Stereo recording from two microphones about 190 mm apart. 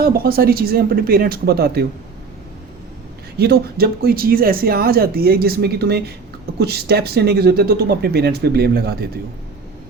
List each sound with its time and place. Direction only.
0.0 s speech: 50° right (ahead or behind)
3.3 s speech: 55° right (ahead or behind)